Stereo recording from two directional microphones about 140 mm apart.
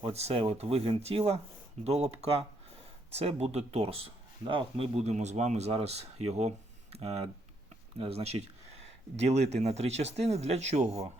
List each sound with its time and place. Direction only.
0.0 s speech: 50° right (ahead or behind)
4.9 s speech: 55° right (ahead or behind)